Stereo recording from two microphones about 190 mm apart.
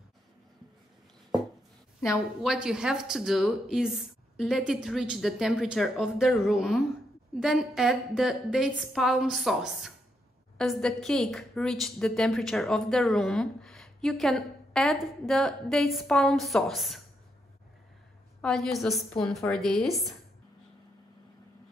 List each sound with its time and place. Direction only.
2.4 s a woman's voice: 5° right (ahead or behind)
18.4 s a woman's voice: centre (ahead or behind)